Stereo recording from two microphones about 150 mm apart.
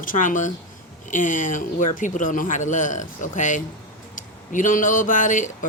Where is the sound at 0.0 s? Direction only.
60° left (ahead or behind).